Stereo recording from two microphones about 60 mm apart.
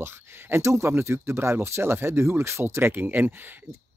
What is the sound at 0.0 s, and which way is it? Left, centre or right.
Speech, right.